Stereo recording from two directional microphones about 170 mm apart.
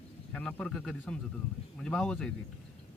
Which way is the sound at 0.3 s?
5° left (ahead or behind).